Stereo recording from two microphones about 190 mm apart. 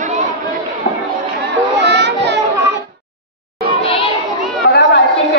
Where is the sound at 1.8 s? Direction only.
65° right (ahead or behind).